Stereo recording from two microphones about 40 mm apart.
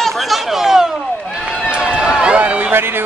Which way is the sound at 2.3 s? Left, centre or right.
Right.